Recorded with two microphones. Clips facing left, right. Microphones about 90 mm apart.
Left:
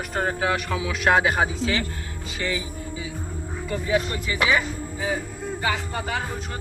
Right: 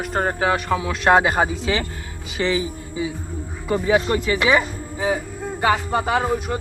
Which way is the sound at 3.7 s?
35° right (ahead or behind).